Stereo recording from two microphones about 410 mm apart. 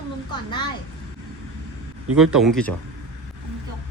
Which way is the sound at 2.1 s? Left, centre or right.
Centre.